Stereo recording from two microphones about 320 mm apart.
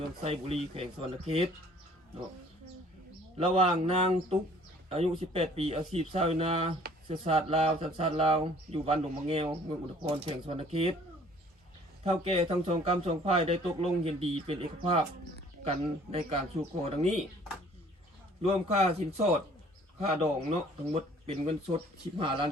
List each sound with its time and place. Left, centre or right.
0.2 s speech: centre
3.3 s a man's voice: centre
12.0 s a man's voice: centre
18.4 s a man's voice: centre